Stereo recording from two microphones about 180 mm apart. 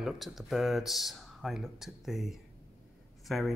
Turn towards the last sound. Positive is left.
turn(degrees=0)  # may be behind; listen again after turning